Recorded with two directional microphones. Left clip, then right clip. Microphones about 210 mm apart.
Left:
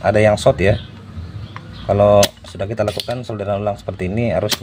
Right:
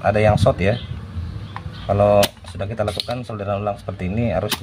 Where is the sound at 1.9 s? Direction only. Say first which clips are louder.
Left 3 dB; 25° left (ahead or behind).